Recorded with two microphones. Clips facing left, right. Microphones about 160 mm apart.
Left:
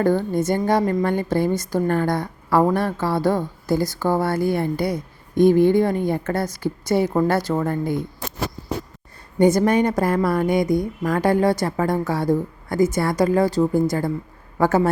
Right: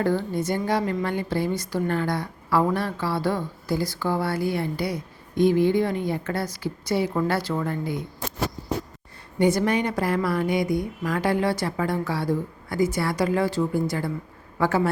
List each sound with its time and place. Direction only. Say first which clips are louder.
0.0 s a woman's voice: left 5 dB; 45° left (ahead or behind)
9.4 s a woman's voice: left 5 dB; 45° left (ahead or behind)